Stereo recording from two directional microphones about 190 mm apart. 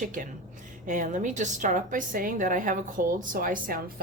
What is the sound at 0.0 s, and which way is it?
Speech, 45° right (ahead or behind).